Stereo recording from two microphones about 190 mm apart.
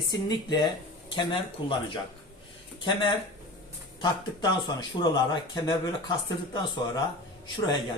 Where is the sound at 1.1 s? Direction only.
25° left (ahead or behind).